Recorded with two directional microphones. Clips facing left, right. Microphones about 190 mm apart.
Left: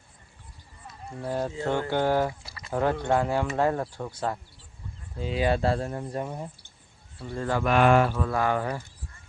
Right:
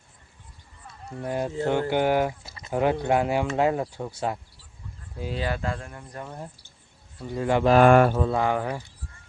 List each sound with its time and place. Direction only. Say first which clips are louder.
1.2 s speech: right 2 dB; 10° right (ahead or behind)
5.1 s speech: left 1 dB; 5° right (ahead or behind)
5.4 s speech: left 6 dB; 25° left (ahead or behind)
6.2 s speech: left 3 dB; 10° left (ahead or behind)
7.3 s speech: right 4 dB; 15° right (ahead or behind)
7.6 s speech: right 5 dB; 35° right (ahead or behind)
7.9 s mantra: right 3 dB; 50° right (ahead or behind)
8.1 s speech: right 2 dB; 25° right (ahead or behind)